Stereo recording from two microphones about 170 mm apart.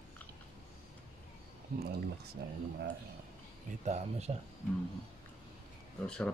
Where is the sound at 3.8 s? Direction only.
40° right (ahead or behind).